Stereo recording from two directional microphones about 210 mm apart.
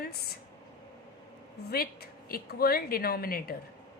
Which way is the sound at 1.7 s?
45° left (ahead or behind).